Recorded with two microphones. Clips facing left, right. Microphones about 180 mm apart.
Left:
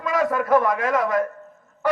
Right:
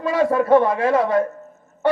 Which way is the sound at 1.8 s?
30° right (ahead or behind).